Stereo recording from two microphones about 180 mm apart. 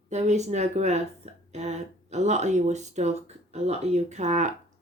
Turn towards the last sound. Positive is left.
turn(degrees=-40)  # may be behind; listen again after turning